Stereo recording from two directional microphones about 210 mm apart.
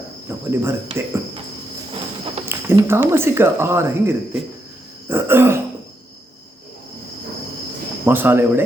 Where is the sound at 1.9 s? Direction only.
25° right (ahead or behind).